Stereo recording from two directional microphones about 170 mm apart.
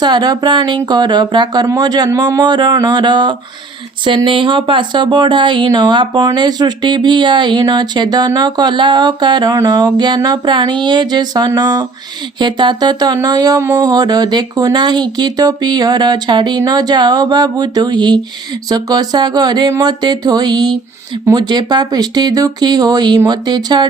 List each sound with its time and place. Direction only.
0.0 s speech: 25° right (ahead or behind)